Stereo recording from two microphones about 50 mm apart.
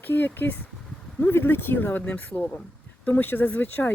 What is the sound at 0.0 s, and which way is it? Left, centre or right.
A woman's voice, left.